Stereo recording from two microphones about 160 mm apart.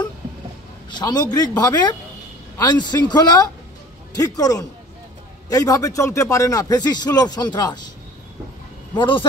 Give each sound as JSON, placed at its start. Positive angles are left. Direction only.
{"t": 0.8, "sound": "a man's voice", "side_deg": 25}
{"t": 8.9, "sound": "a man's voice", "side_deg": 30}